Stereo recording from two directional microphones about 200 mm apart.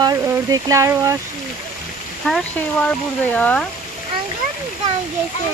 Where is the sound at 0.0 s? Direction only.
15° right (ahead or behind).